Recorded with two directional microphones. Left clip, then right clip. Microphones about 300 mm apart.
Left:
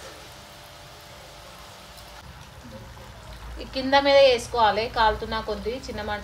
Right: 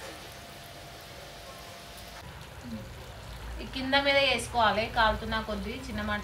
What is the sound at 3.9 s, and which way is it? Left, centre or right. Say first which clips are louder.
A woman's voice: left 8 dB; left.